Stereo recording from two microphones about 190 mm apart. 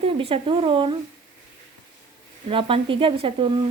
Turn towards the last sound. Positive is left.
turn(degrees=-25)  # may be behind; listen again after turning